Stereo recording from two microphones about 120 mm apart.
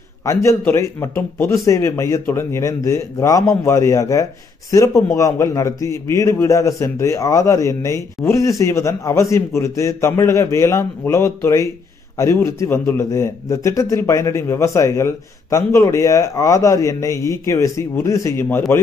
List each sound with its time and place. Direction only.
0.2 s a man's voice: 25° left (ahead or behind)